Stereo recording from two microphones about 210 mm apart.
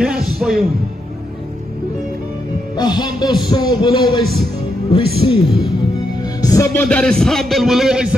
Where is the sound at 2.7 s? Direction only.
20° left (ahead or behind).